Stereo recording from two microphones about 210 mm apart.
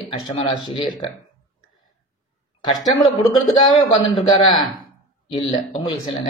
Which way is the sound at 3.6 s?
20° left (ahead or behind).